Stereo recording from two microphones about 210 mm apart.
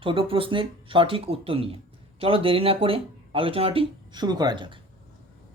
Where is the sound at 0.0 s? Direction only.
25° right (ahead or behind).